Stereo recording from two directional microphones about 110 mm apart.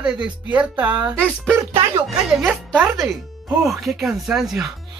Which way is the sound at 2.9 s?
Centre (ahead or behind).